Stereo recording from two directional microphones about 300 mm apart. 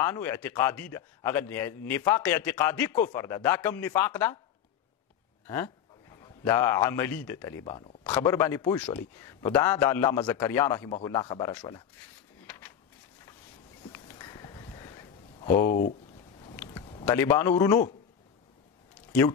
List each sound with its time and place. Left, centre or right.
0.0 s a man's voice: centre
6.4 s a man's voice: centre
13.9 s a sound: centre
17.0 s a man's voice: centre